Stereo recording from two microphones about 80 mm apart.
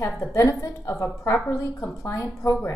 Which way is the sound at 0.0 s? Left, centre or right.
Left.